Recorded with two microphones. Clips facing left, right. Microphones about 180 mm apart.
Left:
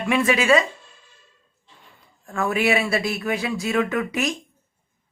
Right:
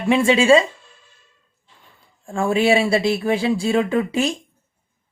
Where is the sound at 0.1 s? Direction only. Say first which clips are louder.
Right 5 dB; 30° right (ahead or behind).